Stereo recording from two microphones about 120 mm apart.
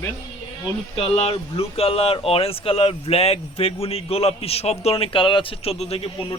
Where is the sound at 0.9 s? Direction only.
55° left (ahead or behind).